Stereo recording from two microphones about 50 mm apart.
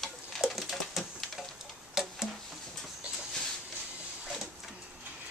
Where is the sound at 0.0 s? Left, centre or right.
Centre.